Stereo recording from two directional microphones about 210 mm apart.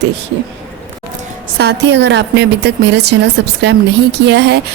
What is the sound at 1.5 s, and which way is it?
Speech, 55° right (ahead or behind).